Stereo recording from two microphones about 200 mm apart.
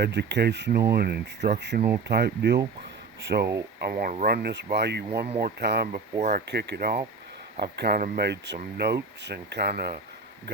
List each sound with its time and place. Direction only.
0.0 s speech: 55° right (ahead or behind)